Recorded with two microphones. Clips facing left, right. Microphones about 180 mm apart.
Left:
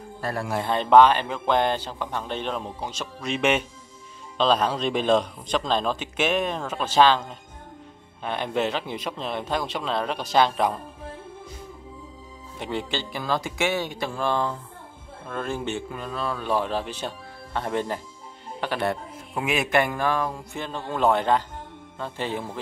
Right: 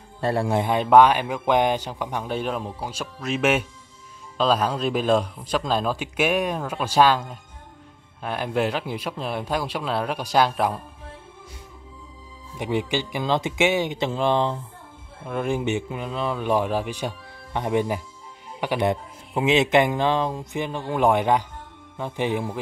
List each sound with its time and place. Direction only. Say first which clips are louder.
0.2 s speech: right 6 dB; 25° right (ahead or behind)
0.7 s a man's voice: even; 10° right (ahead or behind)
12.5 s a man's voice: right 5 dB; 15° right (ahead or behind)